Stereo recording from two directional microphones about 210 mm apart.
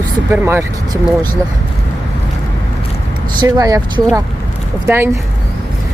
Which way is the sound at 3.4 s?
15° right (ahead or behind).